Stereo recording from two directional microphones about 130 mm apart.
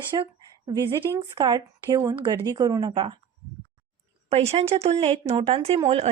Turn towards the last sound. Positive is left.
turn(degrees=-45)  # may be behind; listen again after turning